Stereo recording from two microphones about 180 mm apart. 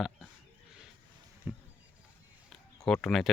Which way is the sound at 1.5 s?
10° right (ahead or behind).